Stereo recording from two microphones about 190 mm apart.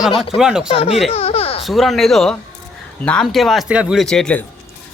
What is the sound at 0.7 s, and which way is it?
Speech, 30° left (ahead or behind).